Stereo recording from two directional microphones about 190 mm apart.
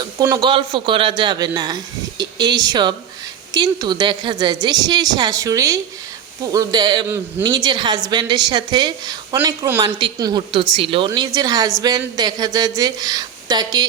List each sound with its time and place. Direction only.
0.0 s a woman's voice: 20° right (ahead or behind)